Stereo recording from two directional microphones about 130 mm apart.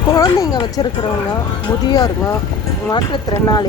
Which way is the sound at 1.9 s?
30° left (ahead or behind).